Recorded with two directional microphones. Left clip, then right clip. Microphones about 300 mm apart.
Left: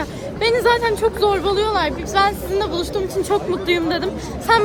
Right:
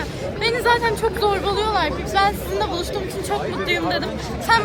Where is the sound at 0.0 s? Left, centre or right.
Centre.